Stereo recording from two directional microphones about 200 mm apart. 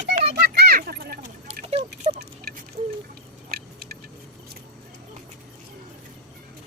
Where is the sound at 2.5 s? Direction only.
50° right (ahead or behind).